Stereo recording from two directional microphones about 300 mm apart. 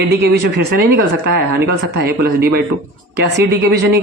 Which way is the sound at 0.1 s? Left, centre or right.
Right.